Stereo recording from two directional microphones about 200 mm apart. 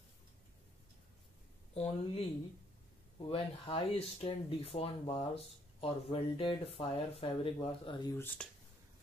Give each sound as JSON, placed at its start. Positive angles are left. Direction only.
{"t": 1.7, "sound": "speech", "side_deg": 30}
{"t": 8.4, "sound": "speech", "side_deg": 5}